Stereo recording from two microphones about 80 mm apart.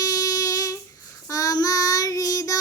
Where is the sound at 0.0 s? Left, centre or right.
Left.